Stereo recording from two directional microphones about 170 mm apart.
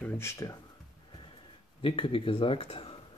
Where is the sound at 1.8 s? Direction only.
30° left (ahead or behind).